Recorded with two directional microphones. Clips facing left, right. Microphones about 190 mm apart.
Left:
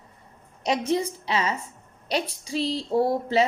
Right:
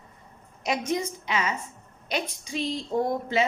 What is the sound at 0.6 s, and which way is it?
A woman's voice, 35° left (ahead or behind).